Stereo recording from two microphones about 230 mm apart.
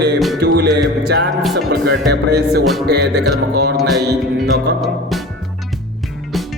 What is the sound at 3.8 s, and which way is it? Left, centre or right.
Music, centre.